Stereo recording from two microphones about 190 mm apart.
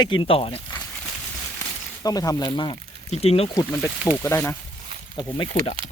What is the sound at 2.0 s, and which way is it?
Speech, 20° left (ahead or behind).